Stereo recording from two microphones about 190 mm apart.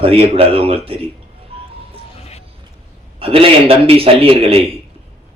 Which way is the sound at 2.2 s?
35° left (ahead or behind).